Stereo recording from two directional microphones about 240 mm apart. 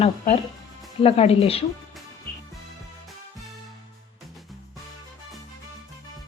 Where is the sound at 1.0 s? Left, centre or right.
Left.